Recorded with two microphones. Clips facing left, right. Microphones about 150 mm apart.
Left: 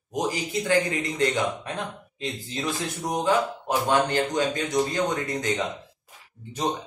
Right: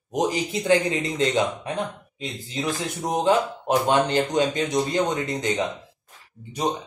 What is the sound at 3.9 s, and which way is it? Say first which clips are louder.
Speech: even; 20° right (ahead or behind).